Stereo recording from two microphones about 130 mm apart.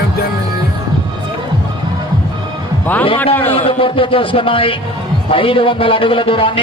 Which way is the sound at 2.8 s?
15° left (ahead or behind).